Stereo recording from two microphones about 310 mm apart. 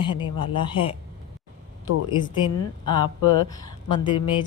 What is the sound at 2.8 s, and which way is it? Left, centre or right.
A woman's voice, centre.